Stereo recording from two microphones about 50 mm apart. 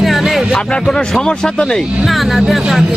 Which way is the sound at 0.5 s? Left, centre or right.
Centre.